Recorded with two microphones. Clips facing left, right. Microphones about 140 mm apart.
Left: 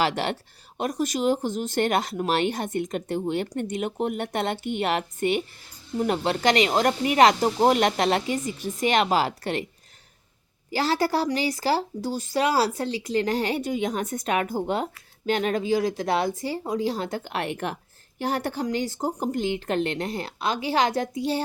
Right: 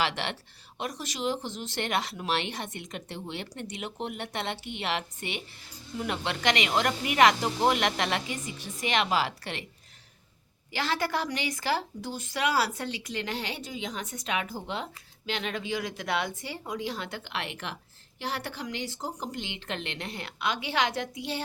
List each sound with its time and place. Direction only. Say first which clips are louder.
0.0 s speech: left 6 dB; 40° left (ahead or behind)
10.7 s speech: left 6 dB; 40° left (ahead or behind)